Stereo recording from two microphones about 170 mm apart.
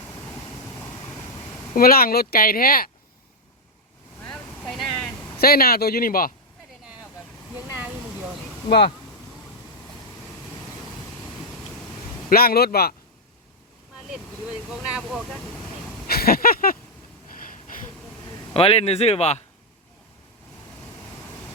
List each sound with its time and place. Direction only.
1.7 s speech: 60° left (ahead or behind)
4.2 s boat: 5° left (ahead or behind)
5.4 s speech: 65° left (ahead or behind)
7.5 s a sound: 10° right (ahead or behind)
8.7 s speech: 25° left (ahead or behind)
12.3 s speech: 60° left (ahead or behind)
14.1 s speech: 5° right (ahead or behind)
16.0 s a sound: 65° left (ahead or behind)
18.5 s speech: 35° left (ahead or behind)